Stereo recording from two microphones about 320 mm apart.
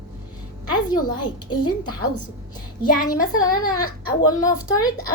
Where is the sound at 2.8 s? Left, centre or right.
Left.